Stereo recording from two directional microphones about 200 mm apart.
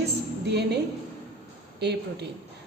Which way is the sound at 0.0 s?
55° right (ahead or behind).